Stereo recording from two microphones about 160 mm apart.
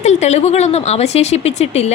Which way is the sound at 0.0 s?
45° left (ahead or behind).